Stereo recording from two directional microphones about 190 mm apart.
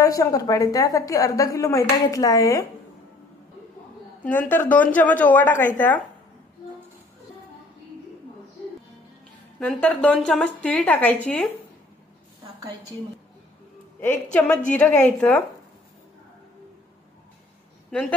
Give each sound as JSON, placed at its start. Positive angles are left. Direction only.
{"t": 0.0, "sound": "a woman's voice", "side_deg": 20}
{"t": 4.2, "sound": "a woman's voice", "side_deg": 10}
{"t": 9.6, "sound": "a woman's voice", "side_deg": 5}
{"t": 14.0, "sound": "a woman's voice", "side_deg": 10}